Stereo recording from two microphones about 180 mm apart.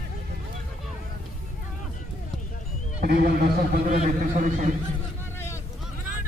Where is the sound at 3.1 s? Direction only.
60° right (ahead or behind); by 4.7 s 45° right (ahead or behind).